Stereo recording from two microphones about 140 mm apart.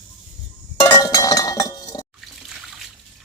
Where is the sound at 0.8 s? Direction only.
30° left (ahead or behind).